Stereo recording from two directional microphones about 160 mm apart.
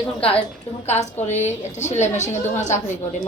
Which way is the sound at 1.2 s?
45° left (ahead or behind).